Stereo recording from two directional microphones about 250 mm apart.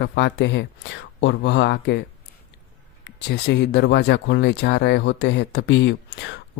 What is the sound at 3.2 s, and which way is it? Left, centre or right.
Speech, left.